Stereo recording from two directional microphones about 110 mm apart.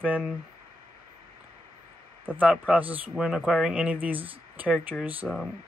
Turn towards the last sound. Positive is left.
turn(degrees=-15)  # may be behind; listen again after turning